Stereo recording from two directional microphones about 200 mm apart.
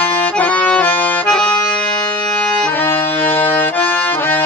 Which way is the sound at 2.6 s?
10° left (ahead or behind).